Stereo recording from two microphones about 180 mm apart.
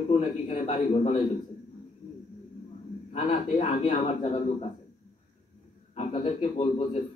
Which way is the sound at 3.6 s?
30° left (ahead or behind).